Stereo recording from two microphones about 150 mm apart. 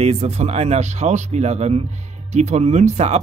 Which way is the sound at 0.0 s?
45° right (ahead or behind).